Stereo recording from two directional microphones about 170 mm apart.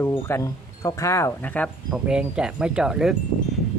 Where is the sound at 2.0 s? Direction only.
5° right (ahead or behind).